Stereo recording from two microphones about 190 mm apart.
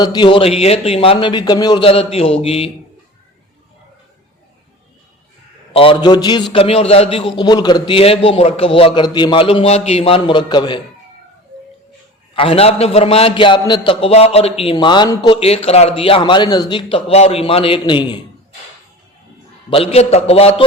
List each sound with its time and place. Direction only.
0.0 s a man's voice: 25° left (ahead or behind)
5.7 s a man's voice: 25° left (ahead or behind)
12.3 s a man's voice: 30° left (ahead or behind)
19.7 s a man's voice: 30° left (ahead or behind)